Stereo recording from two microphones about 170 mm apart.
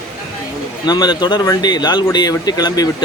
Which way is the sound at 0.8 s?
25° left (ahead or behind).